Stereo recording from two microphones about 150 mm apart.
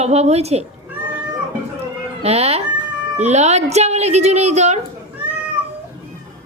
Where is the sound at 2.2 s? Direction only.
45° right (ahead or behind).